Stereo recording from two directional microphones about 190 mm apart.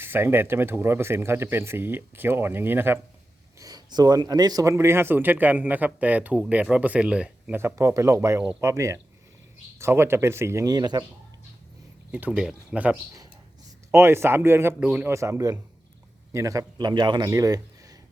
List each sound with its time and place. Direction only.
0.0 s speech: 10° right (ahead or behind)
12.1 s a man's voice: 5° right (ahead or behind)